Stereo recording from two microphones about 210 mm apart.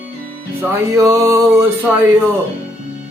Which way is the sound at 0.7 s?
15° right (ahead or behind).